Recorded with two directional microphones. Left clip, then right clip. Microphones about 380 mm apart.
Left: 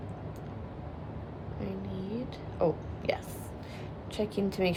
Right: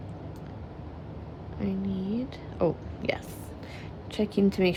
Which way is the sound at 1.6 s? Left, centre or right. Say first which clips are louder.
Right 5 dB; centre.